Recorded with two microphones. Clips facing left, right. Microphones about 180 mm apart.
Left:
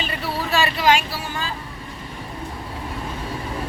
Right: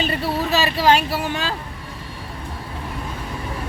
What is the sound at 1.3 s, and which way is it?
Speech, 80° right.